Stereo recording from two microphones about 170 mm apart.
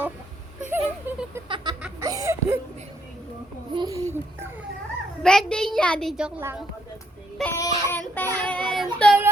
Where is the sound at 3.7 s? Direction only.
20° right (ahead or behind).